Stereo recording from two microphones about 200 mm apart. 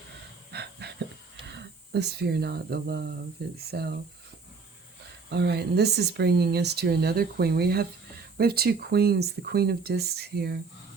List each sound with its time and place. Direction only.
0.5 s pant: 55° right (ahead or behind)
1.5 s speech: 55° right (ahead or behind)
5.3 s speech: 55° right (ahead or behind)